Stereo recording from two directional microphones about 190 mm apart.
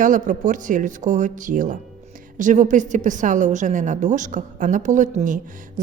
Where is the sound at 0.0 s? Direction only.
40° right (ahead or behind).